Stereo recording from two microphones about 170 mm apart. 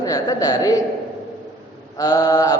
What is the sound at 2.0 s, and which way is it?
Speech, 20° left (ahead or behind).